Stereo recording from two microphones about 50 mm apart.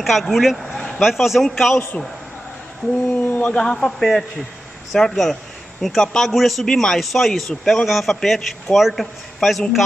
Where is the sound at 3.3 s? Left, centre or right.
Left.